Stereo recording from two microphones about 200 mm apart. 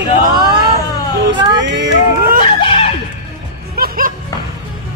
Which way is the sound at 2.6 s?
30° left (ahead or behind).